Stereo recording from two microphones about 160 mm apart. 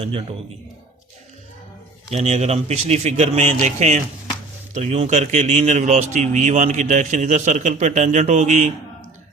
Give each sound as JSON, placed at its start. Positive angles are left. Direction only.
{"t": 0.0, "sound": "a man's voice", "side_deg": -35}
{"t": 2.1, "sound": "speech", "side_deg": -45}